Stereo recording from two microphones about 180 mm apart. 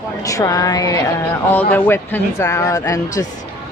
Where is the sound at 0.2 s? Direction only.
20° left (ahead or behind).